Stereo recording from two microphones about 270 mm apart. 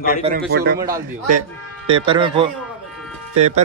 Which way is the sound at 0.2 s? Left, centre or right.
Right.